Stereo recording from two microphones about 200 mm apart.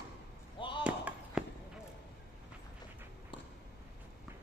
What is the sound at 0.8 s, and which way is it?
Basketball bounce, 5° right (ahead or behind).